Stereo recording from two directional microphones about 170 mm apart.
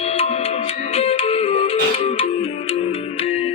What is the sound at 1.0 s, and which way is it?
Music, 40° left (ahead or behind).